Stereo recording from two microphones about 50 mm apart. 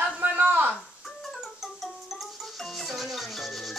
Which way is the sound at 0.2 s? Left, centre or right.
Right.